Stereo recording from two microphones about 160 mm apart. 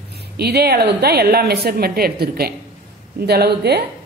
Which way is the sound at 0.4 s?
85° right.